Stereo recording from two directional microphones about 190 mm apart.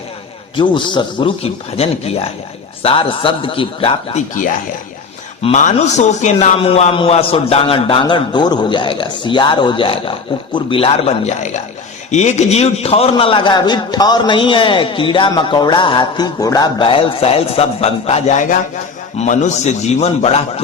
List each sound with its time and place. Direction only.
0.5 s a man's voice: 25° left (ahead or behind)
5.4 s a man's voice: 35° left (ahead or behind)